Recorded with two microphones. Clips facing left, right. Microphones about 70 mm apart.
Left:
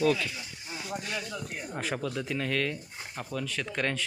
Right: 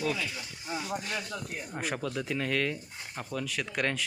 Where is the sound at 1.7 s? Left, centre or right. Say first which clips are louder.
Left 1 dB; centre.